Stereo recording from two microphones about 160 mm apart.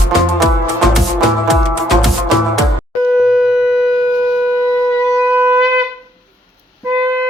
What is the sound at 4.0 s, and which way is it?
Shofar, 20° right (ahead or behind).